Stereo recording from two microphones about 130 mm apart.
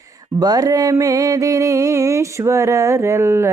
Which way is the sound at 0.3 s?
30° right (ahead or behind).